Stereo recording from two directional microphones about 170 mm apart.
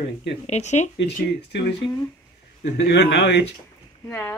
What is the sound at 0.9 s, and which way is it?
Speech, 90° left.